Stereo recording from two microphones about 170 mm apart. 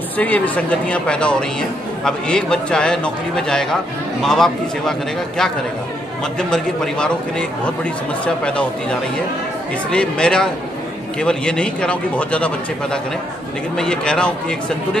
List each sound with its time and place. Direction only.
0.2 s speech: 5° left (ahead or behind)
6.5 s speech: 5° left (ahead or behind)
9.8 s speech: 5° left (ahead or behind)